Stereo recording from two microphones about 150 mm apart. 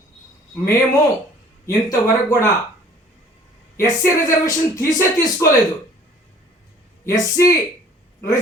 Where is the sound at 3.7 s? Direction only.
20° left (ahead or behind).